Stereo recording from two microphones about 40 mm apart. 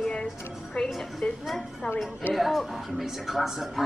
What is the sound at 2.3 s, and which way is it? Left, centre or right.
A woman's voice, centre.